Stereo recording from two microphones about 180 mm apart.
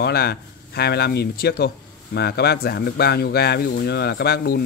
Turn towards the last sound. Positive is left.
turn(degrees=60)  # may be behind; listen again after turning